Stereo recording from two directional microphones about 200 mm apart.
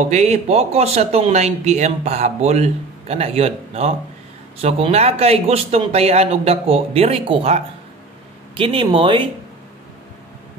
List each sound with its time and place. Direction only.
0.1 s speech: 35° right (ahead or behind)